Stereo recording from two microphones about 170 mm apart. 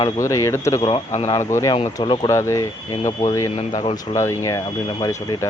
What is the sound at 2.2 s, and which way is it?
Speech, 15° left (ahead or behind).